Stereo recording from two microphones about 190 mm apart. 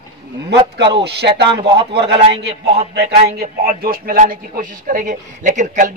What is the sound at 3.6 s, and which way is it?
A man's voice, 50° right (ahead or behind).